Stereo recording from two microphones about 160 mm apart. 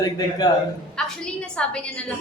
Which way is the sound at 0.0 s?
25° left (ahead or behind).